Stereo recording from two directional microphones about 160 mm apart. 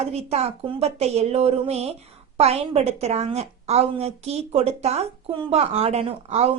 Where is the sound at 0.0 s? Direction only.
40° right (ahead or behind).